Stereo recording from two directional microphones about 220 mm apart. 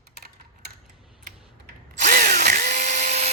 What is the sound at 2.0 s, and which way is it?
Drill, 40° right (ahead or behind).